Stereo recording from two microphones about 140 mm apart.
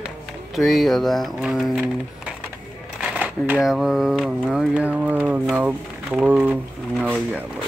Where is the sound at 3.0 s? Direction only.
10° right (ahead or behind).